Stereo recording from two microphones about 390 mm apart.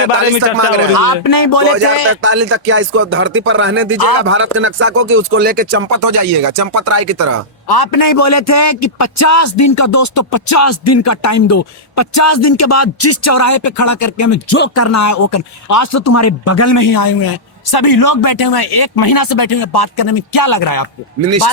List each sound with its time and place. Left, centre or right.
0.9 s speech: left
2.2 s speech: right
5.9 s speech: right
7.7 s a man's voice: left
21.2 s speech: right